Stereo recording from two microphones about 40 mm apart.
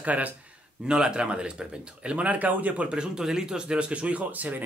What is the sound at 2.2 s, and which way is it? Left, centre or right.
Speech, right.